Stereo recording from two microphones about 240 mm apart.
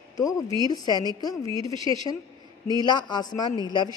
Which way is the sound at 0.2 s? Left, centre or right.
Centre.